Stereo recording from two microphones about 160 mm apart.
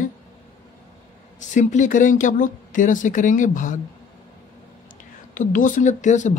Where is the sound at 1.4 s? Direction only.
50° left (ahead or behind).